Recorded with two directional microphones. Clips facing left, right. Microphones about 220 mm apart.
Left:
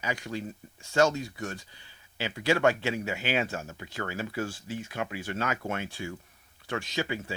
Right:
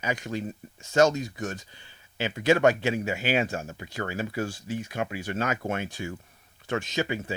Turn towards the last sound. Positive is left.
turn(degrees=-20)  # may be behind; listen again after turning